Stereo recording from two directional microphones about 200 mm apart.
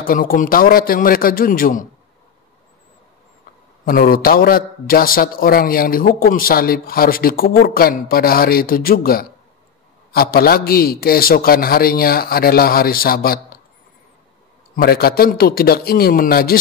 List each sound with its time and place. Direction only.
0.0 s a man's voice: 45° left (ahead or behind)
3.8 s a man's voice: 45° left (ahead or behind)
14.8 s a man's voice: 50° left (ahead or behind)